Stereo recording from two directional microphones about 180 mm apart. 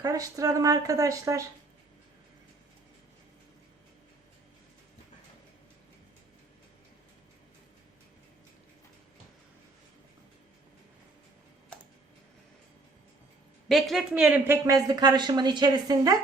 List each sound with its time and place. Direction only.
0.0 s speech: 20° right (ahead or behind)
13.7 s speech: centre (ahead or behind); by 16.1 s 20° right (ahead or behind)